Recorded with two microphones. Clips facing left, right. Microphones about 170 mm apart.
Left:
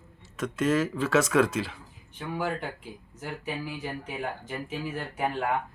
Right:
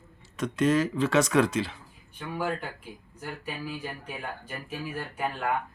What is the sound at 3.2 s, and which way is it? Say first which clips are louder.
Speech: left 2 dB; 20° left (ahead or behind).